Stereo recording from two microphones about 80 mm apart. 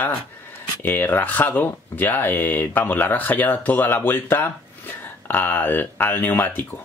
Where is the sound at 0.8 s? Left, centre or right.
Left.